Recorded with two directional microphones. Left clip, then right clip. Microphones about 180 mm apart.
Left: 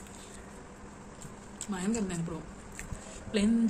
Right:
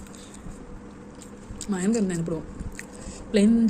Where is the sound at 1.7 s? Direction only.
15° right (ahead or behind).